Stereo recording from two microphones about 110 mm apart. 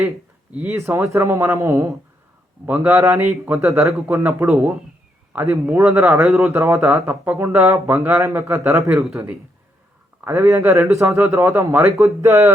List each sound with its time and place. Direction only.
0.5 s speech: 20° right (ahead or behind)
2.6 s speech: 15° right (ahead or behind)
2.9 s speech: 25° right (ahead or behind)
3.8 s speech: 25° right (ahead or behind)
10.2 s speech: 25° right (ahead or behind)